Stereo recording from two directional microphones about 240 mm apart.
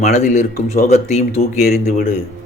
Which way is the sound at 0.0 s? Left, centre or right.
Left.